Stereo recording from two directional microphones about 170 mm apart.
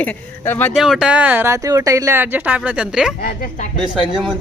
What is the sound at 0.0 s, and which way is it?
Speech, 10° left (ahead or behind).